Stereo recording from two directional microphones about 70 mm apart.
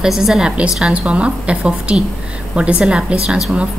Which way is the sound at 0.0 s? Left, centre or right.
Centre.